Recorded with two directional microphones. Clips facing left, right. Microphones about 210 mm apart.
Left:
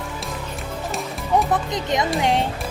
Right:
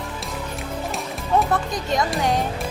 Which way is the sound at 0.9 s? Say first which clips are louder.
Left 2 dB; centre (ahead or behind).